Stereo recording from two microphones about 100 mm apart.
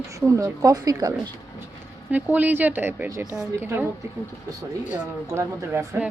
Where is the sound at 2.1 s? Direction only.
15° right (ahead or behind).